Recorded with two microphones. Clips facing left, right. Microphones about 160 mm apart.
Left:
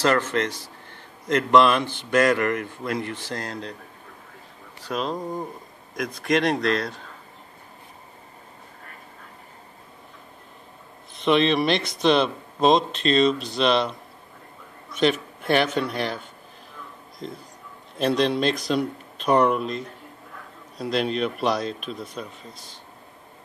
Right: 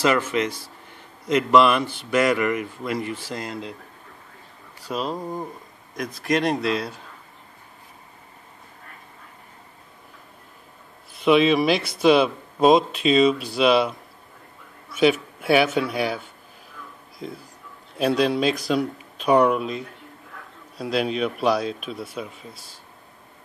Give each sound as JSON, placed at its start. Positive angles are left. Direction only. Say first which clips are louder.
{"t": 0.0, "sound": "a man's voice", "louder": "right 1 dB", "side_deg": -10}
{"t": 4.8, "sound": "a man's voice", "louder": "even", "side_deg": -5}
{"t": 11.1, "sound": "a man's voice", "louder": "right 3 dB", "side_deg": -5}